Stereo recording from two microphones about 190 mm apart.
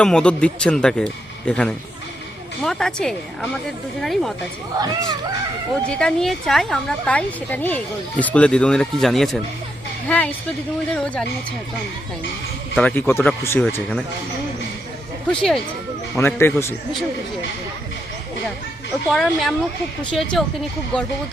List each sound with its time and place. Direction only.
0.0 s speech: 5° left (ahead or behind)
4.8 s speech: 20° right (ahead or behind)
5.9 s speech: 5° left (ahead or behind)
12.7 s speech: 10° left (ahead or behind)
15.3 s speech: 5° left (ahead or behind)
19.0 s speech: centre (ahead or behind)